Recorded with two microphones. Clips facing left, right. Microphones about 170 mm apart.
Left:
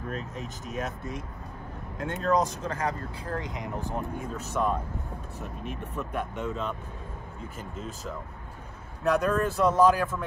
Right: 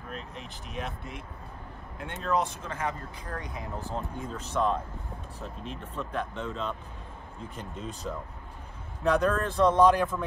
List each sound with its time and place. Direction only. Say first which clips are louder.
0.1 s speech: left 5 dB; 45° left (ahead or behind); by 10.2 s centre (ahead or behind)